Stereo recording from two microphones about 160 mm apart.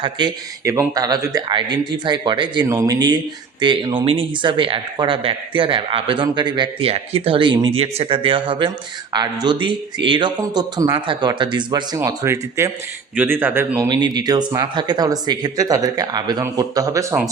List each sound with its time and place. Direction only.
0.0 s speech: 25° right (ahead or behind)
13.8 s speech: 25° right (ahead or behind)